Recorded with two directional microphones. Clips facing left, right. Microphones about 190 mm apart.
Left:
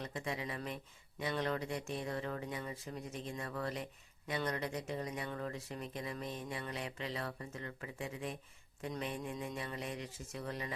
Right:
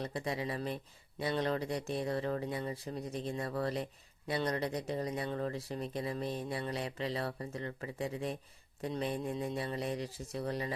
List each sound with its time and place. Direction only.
0.0 s speech: 35° right (ahead or behind)